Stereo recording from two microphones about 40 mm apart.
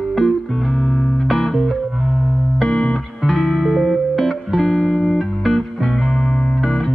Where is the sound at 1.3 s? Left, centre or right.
Centre.